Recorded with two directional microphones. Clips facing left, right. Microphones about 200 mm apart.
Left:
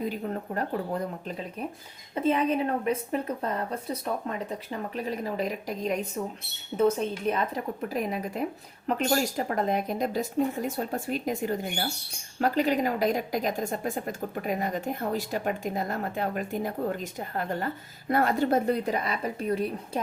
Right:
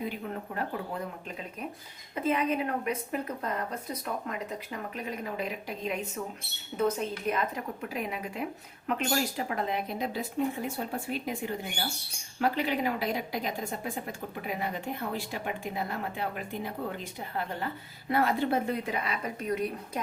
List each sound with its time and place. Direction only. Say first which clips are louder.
0.1 s speech: left 5 dB; 40° left (ahead or behind)
2.1 s a woman's voice: left 3 dB; 30° left (ahead or behind)
4.9 s a woman's voice: left 5 dB; 35° left (ahead or behind)
6.7 s a woman's voice: left 5 dB; 30° left (ahead or behind)